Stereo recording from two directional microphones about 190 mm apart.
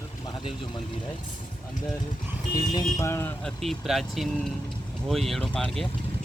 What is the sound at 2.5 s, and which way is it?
Speech, 20° left (ahead or behind).